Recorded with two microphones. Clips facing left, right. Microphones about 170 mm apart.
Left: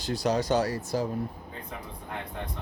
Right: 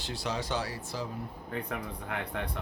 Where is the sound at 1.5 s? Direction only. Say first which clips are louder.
Right 5 dB; 75° right (ahead or behind).